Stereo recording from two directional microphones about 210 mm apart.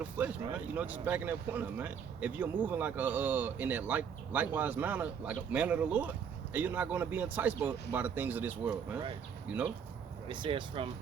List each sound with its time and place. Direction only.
0.0 s speech: 5° right (ahead or behind)
10.2 s speech: 25° right (ahead or behind)